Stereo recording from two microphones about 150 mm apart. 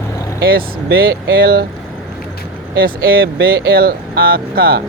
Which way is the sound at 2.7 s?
90° right.